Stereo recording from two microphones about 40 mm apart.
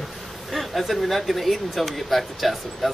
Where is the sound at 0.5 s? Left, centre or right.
Centre.